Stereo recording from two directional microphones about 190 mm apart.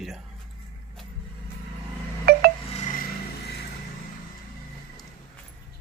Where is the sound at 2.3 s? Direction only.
55° right (ahead or behind).